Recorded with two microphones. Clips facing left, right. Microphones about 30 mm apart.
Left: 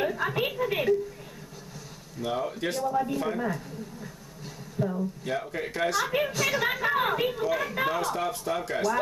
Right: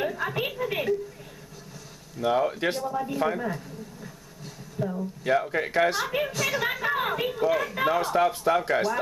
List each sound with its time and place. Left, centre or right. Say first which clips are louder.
0.0 s a woman's voice: left 1 dB; centre
2.1 s speech: right 6 dB; centre
2.8 s a woman's voice: even; centre
5.2 s speech: right 6 dB; centre
6.0 s a woman's voice: even; centre
8.0 s speech: right 6 dB; centre